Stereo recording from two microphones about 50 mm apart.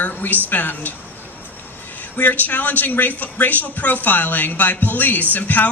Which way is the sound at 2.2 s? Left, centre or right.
Left.